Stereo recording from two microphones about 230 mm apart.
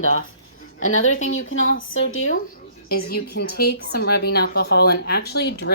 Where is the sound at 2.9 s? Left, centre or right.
Left.